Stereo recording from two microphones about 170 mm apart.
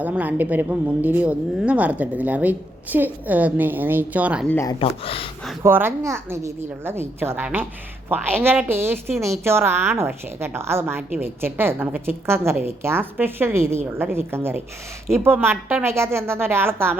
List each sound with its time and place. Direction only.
0.0 s a woman's voice: 10° right (ahead or behind)
4.4 s speech: 15° left (ahead or behind)
4.8 s speech: 35° left (ahead or behind)
5.6 s a woman's voice: 15° right (ahead or behind)